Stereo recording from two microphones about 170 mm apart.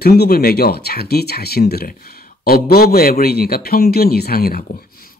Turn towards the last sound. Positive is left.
turn(degrees=60)  # may be behind; listen again after turning